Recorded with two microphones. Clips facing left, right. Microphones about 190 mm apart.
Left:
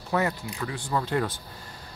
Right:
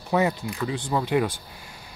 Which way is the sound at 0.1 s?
20° right (ahead or behind).